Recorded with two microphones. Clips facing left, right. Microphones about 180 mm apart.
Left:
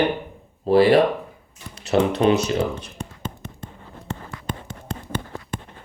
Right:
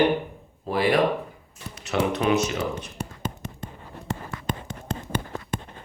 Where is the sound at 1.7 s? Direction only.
30° left (ahead or behind).